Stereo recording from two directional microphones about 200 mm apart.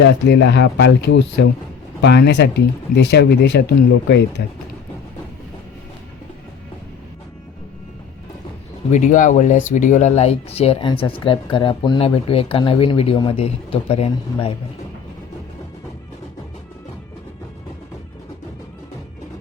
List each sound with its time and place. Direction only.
0.0 s speech: 60° left (ahead or behind)
8.9 s speech: 40° left (ahead or behind)